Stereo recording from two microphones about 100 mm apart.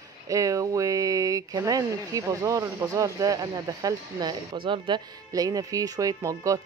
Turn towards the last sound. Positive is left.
turn(degrees=-35)  # may be behind; listen again after turning